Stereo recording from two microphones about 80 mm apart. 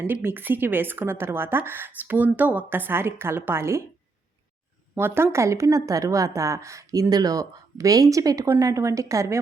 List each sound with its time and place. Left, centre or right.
0.1 s a woman's voice: right
4.9 s a woman's voice: right